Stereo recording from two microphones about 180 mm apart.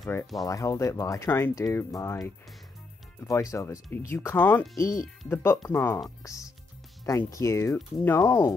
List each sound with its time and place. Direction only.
0.5 s speech: 15° left (ahead or behind)